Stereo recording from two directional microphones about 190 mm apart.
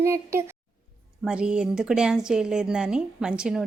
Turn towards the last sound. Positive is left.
turn(degrees=-5)  # may be behind; listen again after turning